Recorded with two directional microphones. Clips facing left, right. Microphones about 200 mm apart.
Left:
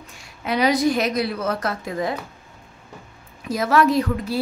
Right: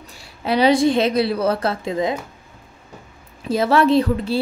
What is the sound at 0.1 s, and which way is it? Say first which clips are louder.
A woman's voice: right 4 dB; 30° right (ahead or behind).